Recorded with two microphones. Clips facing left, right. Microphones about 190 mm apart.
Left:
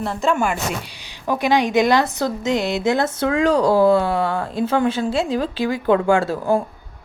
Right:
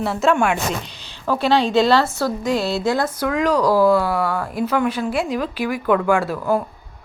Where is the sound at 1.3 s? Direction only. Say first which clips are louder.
Even; 15° left (ahead or behind).